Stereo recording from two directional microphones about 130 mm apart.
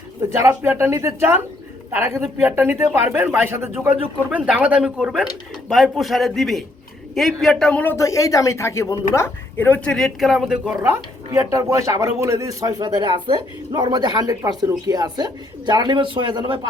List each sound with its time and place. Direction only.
0.3 s a man's voice: 20° right (ahead or behind); by 7.9 s 10° left (ahead or behind)
7.9 s a man's voice: 25° left (ahead or behind); by 10.8 s 5° right (ahead or behind)
10.8 s speech: 20° right (ahead or behind); by 16.6 s 35° right (ahead or behind)